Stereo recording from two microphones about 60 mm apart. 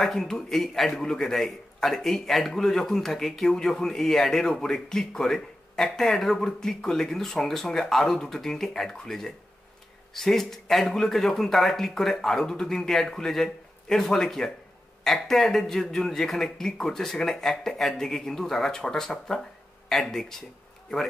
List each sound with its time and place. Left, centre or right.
0.0 s a man's voice: centre